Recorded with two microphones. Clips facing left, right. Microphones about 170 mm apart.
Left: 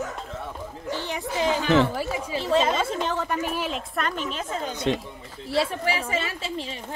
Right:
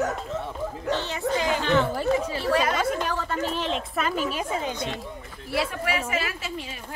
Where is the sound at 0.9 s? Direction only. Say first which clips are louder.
Right 3 dB; 70° right (ahead or behind).